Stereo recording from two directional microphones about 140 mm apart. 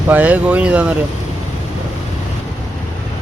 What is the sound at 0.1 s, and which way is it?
Speech, 10° right (ahead or behind).